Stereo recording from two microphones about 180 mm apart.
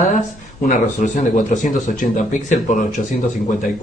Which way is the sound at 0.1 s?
45° left (ahead or behind).